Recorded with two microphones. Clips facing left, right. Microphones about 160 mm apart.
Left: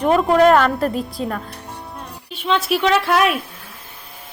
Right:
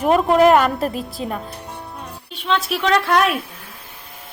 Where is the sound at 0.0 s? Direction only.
10° right (ahead or behind).